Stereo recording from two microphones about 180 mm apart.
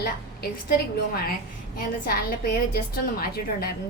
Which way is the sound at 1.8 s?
60° left (ahead or behind).